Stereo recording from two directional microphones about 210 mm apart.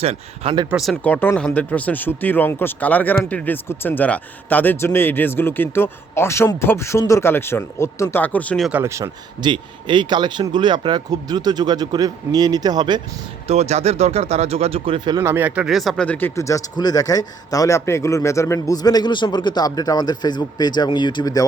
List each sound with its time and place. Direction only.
0.0 s speech: 30° right (ahead or behind)
0.7 s speech: centre (ahead or behind)
8.8 s speech: 15° right (ahead or behind)
13.5 s speech: 30° right (ahead or behind); by 21.4 s 20° left (ahead or behind)